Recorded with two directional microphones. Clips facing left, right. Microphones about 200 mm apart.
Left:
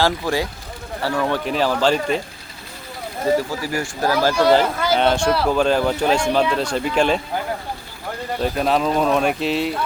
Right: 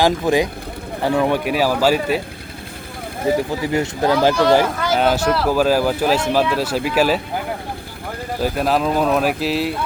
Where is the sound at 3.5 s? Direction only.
20° right (ahead or behind).